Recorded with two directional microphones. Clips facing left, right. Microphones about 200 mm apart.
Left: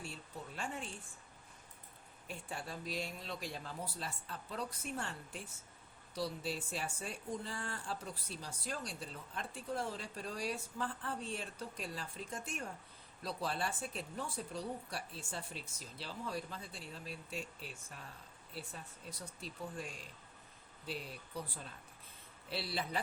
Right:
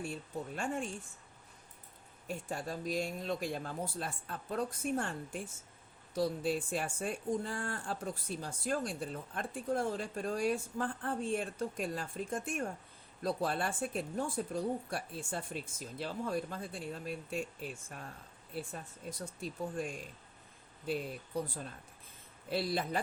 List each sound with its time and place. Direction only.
0.5 s speech: 50° right (ahead or behind)
2.2 s speech: 45° right (ahead or behind)